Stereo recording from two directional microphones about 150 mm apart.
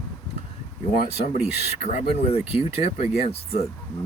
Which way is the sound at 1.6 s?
45° left (ahead or behind).